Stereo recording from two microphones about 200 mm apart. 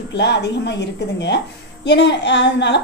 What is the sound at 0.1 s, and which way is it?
A woman's voice, 60° left (ahead or behind).